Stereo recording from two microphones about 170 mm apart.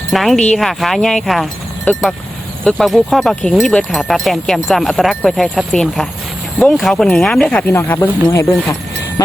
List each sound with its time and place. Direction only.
0.1 s speech: centre (ahead or behind); by 8.7 s 20° left (ahead or behind)